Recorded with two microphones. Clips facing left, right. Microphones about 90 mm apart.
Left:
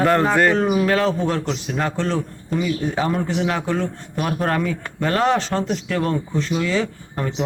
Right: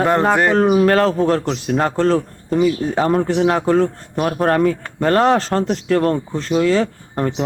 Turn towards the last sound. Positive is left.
turn(degrees=-45)  # may be behind; listen again after turning